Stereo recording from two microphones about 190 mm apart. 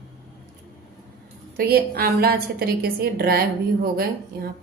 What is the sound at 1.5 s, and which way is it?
A woman's voice, 55° right (ahead or behind).